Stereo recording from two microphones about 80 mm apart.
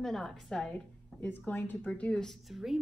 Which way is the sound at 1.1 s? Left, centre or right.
Left.